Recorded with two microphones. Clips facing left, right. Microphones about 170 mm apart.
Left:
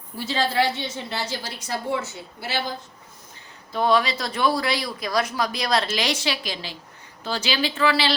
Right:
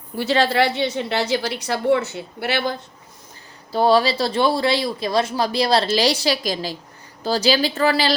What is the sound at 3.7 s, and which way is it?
Speech, 35° right (ahead or behind).